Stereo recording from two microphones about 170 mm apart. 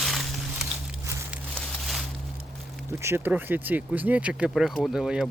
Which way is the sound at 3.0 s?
15° right (ahead or behind).